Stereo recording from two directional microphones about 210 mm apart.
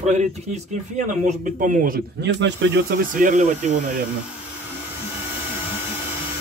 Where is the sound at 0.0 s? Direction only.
35° right (ahead or behind); by 3.0 s 60° right (ahead or behind).